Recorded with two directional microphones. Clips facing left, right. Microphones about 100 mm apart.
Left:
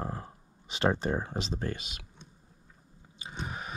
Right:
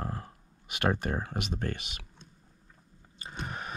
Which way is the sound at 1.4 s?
60° right (ahead or behind).